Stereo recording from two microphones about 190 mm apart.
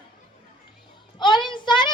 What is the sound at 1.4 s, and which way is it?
Child singing, 25° left (ahead or behind).